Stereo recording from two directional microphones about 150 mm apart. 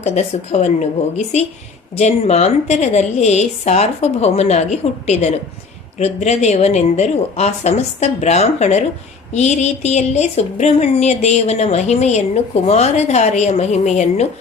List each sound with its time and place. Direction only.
0.0 s speech: 50° left (ahead or behind)